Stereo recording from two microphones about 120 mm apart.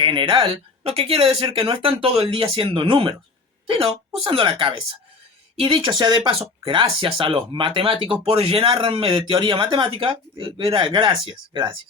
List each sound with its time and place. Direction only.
0.0 s speech: 45° right (ahead or behind)